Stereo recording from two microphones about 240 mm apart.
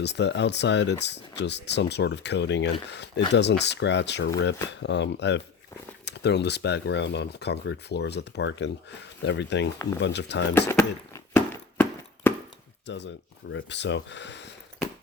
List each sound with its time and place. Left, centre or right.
0.0 s speech: left
10.7 s a sound: centre
12.8 s speech: left